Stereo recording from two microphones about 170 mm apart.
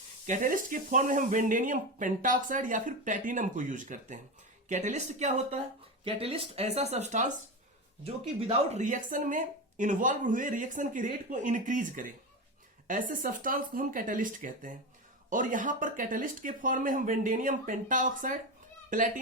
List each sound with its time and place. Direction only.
0.3 s speech: 55° right (ahead or behind)